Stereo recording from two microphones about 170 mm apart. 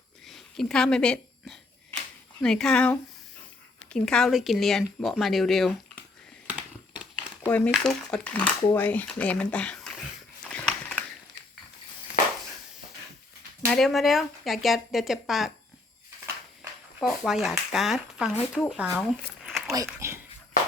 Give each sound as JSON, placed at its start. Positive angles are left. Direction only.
{"t": 0.3, "sound": "a sound", "side_deg": 0}
{"t": 2.4, "sound": "a woman's voice", "side_deg": 5}
{"t": 6.5, "sound": "crumpling", "side_deg": -5}
{"t": 7.4, "sound": "speech", "side_deg": 10}
{"t": 10.5, "sound": "a sound", "side_deg": 5}
{"t": 13.7, "sound": "a woman's voice", "side_deg": 0}
{"t": 17.0, "sound": "a woman's voice", "side_deg": 0}
{"t": 19.6, "sound": "speech", "side_deg": -15}